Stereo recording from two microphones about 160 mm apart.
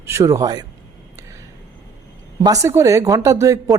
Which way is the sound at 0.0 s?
20° right (ahead or behind).